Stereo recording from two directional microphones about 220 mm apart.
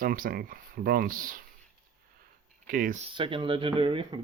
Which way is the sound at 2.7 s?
35° right (ahead or behind).